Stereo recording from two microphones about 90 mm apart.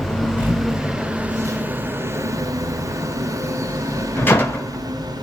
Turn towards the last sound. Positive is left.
turn(degrees=25)  # may be behind; listen again after turning